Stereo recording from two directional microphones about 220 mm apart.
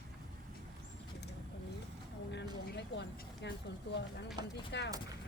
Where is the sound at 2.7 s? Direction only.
50° left (ahead or behind).